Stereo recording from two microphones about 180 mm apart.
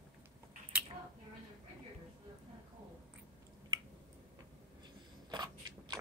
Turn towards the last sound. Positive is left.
turn(degrees=-25)  # may be behind; listen again after turning